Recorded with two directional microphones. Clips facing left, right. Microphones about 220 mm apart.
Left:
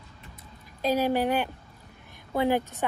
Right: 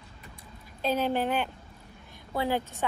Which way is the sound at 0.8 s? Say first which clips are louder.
Left 3 dB; 10° left (ahead or behind).